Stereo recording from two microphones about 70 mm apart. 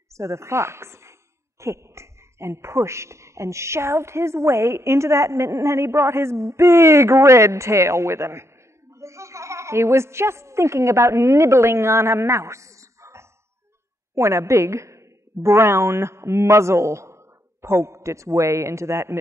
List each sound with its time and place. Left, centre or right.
0.1 s a woman's voice: right